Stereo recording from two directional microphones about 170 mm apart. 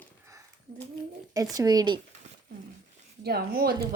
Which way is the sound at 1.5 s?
20° right (ahead or behind).